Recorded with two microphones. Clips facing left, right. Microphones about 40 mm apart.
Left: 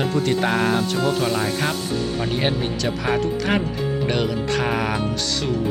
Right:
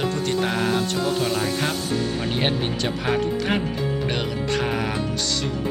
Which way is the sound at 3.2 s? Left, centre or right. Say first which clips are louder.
Left 2 dB; centre.